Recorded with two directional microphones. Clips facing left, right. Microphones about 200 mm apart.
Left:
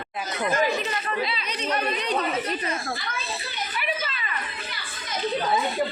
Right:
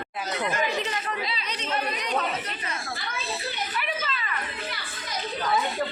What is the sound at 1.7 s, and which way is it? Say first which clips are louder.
Speech: left 1 dB; 25° left (ahead or behind).